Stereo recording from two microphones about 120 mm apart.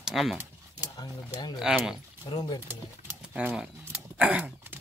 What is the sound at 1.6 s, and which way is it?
Speech, 5° right (ahead or behind).